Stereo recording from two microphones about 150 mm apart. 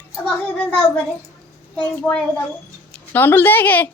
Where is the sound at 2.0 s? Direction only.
5° left (ahead or behind).